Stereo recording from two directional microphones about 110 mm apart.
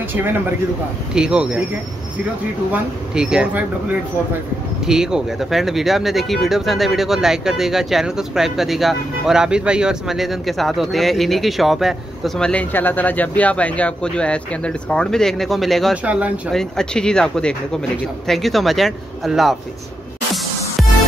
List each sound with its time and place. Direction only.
0.1 s speech: 20° right (ahead or behind)
1.1 s speech: 5° right (ahead or behind)
3.2 s speech: 5° right (ahead or behind)
4.8 s speech: 5° right (ahead or behind)
12.4 s speech: 15° left (ahead or behind)
16.0 s speech: 10° right (ahead or behind)
16.5 s speech: 5° left (ahead or behind)